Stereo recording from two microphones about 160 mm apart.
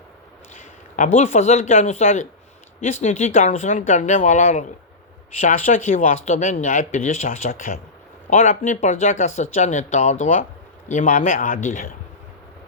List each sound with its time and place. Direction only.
0.6 s speech: 50° left (ahead or behind)